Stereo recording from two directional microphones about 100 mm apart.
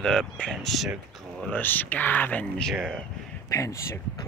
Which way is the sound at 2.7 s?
5° right (ahead or behind).